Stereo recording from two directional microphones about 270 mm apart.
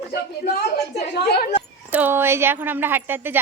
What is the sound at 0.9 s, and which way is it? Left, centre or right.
Speech, left.